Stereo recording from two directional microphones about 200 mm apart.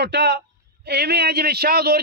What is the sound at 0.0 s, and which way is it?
A man's voice, 55° right (ahead or behind).